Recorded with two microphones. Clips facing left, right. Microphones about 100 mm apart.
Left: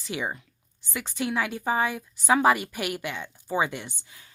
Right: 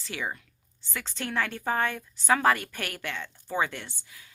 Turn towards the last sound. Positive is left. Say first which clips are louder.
# left 3 dB
turn(degrees=25)  # may be behind; listen again after turning